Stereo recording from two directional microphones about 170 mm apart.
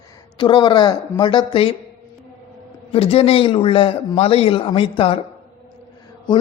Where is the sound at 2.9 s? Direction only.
35° left (ahead or behind).